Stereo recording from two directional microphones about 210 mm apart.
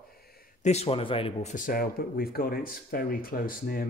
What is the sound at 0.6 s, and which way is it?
Speech, 30° left (ahead or behind).